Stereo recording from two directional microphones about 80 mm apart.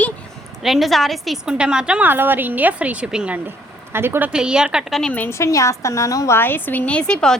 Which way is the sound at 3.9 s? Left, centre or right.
Right.